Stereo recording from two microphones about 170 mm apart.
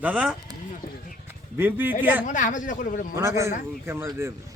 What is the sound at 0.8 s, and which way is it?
Speech, 55° left (ahead or behind).